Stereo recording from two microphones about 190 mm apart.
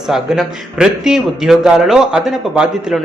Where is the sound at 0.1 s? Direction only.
Centre (ahead or behind).